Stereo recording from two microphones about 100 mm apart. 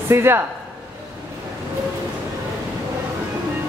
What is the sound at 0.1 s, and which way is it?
Speech, 25° right (ahead or behind).